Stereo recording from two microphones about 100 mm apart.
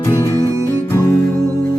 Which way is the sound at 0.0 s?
35° left (ahead or behind).